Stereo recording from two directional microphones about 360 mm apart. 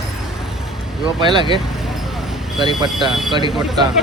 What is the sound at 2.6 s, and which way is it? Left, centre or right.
Speech, centre.